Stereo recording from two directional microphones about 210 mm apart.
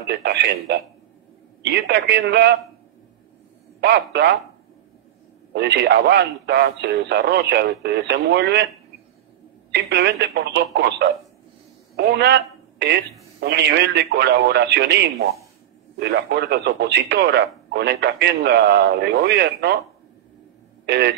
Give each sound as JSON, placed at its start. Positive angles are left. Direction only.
{"t": 0.2, "sound": "speech", "side_deg": -55}
{"t": 3.8, "sound": "speech", "side_deg": -50}
{"t": 5.5, "sound": "speech", "side_deg": -55}
{"t": 9.7, "sound": "speech", "side_deg": -55}
{"t": 20.8, "sound": "speech", "side_deg": -55}